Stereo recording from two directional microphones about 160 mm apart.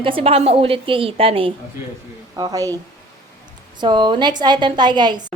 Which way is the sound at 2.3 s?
25° right (ahead or behind).